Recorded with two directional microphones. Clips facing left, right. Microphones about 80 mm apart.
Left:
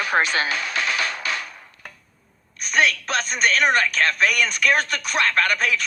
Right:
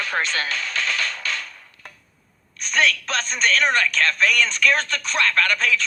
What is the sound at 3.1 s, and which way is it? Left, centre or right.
Speech, centre.